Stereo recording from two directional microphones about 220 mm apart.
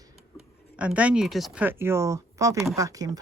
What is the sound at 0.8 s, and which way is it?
A woman's voice, 5° right (ahead or behind).